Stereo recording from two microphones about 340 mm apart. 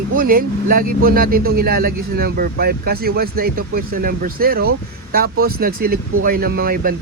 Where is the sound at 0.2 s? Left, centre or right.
Right.